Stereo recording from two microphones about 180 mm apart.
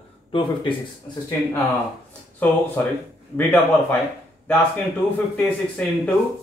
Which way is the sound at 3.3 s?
10° left (ahead or behind).